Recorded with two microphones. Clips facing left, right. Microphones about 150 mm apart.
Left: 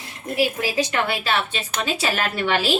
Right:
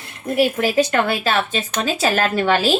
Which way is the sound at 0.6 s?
45° right (ahead or behind).